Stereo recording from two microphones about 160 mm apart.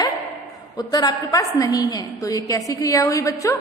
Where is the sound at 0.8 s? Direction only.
25° left (ahead or behind).